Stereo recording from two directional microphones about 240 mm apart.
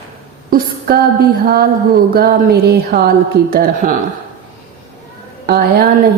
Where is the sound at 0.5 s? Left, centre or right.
Right.